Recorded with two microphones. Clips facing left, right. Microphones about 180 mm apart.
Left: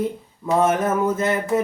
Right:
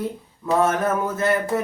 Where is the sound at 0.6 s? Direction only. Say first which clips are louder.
Left 2 dB; 20° left (ahead or behind).